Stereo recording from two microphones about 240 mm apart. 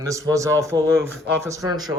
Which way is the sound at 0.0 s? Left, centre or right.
Centre.